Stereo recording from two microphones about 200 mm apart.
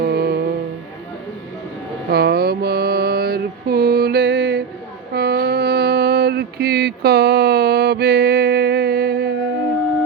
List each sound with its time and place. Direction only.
0.0 s music: 50° right (ahead or behind)
2.0 s mantra: 50° right (ahead or behind)